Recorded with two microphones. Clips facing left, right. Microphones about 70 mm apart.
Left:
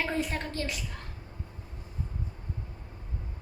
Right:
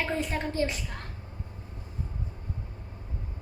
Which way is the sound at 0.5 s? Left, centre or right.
Right.